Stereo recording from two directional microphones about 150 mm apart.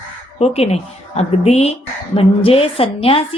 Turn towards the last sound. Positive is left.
turn(degrees=40)  # may be behind; listen again after turning